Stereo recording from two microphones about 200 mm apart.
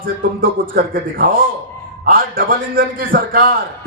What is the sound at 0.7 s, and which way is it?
A man's voice, 45° right (ahead or behind).